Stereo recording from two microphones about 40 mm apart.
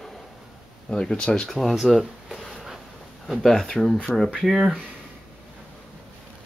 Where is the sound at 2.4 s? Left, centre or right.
Centre.